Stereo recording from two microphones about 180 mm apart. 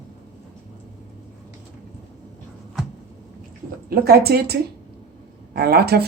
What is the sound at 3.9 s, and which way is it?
Speech, 60° right (ahead or behind).